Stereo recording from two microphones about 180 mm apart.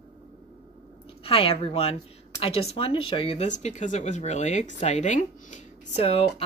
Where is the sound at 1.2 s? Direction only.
30° left (ahead or behind).